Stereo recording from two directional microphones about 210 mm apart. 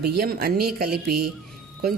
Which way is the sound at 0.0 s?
50° right (ahead or behind).